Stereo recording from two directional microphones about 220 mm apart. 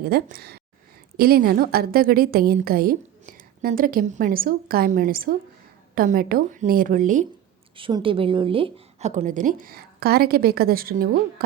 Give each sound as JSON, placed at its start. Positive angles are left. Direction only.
{"t": 0.0, "sound": "a woman's voice", "side_deg": -45}
{"t": 7.8, "sound": "a woman's voice", "side_deg": -25}